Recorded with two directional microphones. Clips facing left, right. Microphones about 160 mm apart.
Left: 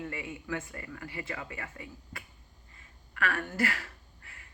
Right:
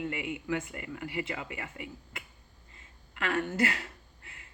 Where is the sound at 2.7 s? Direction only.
20° right (ahead or behind).